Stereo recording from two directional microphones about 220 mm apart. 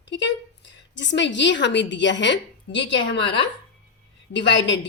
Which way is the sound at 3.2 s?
20° left (ahead or behind).